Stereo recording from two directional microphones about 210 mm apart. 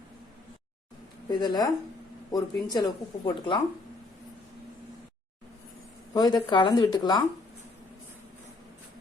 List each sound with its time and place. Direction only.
1.3 s speech: 20° left (ahead or behind)
6.1 s speech: 20° left (ahead or behind)